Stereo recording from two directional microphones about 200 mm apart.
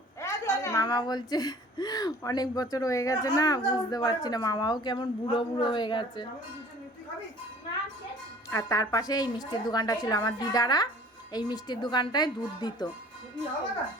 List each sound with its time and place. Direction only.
0.2 s speech: 15° left (ahead or behind)
8.4 s speech: 15° left (ahead or behind)